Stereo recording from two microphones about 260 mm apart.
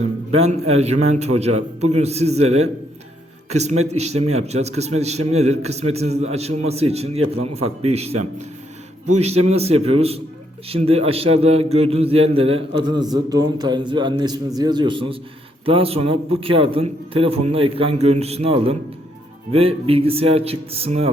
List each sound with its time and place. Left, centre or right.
0.0 s a man's voice: right